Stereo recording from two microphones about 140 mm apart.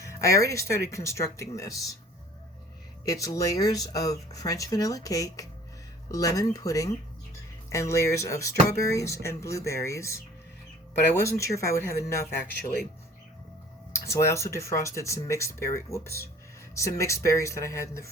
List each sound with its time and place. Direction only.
0.0 s speech: 20° left (ahead or behind)
3.1 s speech: 25° left (ahead or behind)
14.1 s speech: 20° left (ahead or behind)